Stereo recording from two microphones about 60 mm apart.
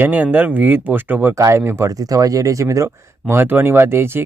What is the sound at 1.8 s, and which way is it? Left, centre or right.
Speech, right.